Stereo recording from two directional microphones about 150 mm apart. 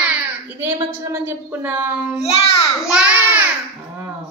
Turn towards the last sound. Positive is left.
turn(degrees=-10)  # may be behind; listen again after turning